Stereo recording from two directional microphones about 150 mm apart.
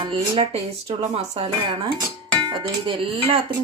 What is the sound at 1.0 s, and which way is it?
Speech, 45° right (ahead or behind).